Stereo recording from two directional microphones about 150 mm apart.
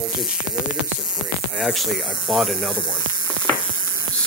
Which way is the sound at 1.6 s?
Centre (ahead or behind).